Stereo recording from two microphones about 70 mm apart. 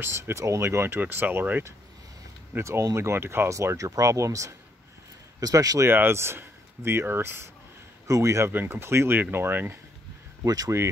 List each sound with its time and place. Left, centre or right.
0.0 s speech: right
2.5 s speech: right
5.4 s speech: right
5.9 s speech: right
8.1 s speech: right
8.5 s speech: right
10.4 s speech: right